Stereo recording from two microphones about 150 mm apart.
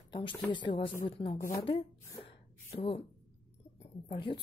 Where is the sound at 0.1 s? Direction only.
30° left (ahead or behind).